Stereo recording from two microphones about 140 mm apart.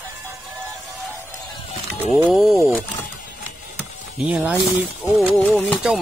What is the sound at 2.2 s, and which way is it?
Speech, 5° right (ahead or behind).